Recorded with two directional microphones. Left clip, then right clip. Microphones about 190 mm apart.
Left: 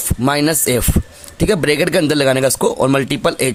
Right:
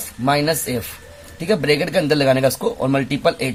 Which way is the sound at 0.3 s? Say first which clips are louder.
Left 3 dB; 45° left (ahead or behind).